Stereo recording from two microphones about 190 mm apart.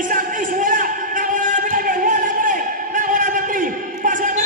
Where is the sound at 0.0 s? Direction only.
45° right (ahead or behind).